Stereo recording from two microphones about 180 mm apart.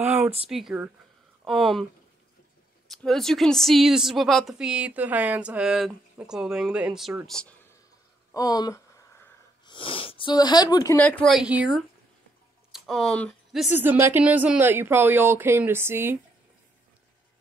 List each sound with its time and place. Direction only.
0.0 s a sound: 10° right (ahead or behind)
0.5 s speech: centre (ahead or behind)
2.9 s speech: centre (ahead or behind)
8.3 s speech: 20° left (ahead or behind)
9.7 s speech: 30° left (ahead or behind)
11.0 s speech: 5° left (ahead or behind)
13.8 s speech: 10° right (ahead or behind)